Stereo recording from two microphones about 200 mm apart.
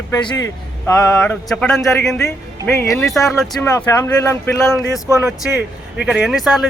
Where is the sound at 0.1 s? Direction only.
15° left (ahead or behind).